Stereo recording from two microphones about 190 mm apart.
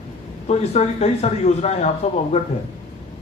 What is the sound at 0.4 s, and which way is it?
Speech, 35° left (ahead or behind).